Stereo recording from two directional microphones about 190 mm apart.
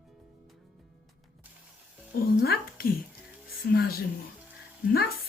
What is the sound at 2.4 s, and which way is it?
Speech, 50° left (ahead or behind).